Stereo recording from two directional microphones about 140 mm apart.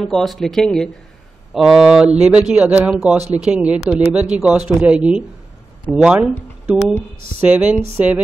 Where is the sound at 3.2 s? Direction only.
50° right (ahead or behind).